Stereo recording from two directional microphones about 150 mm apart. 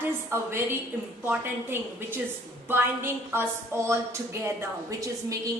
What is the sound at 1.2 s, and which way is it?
A woman's voice, 15° right (ahead or behind).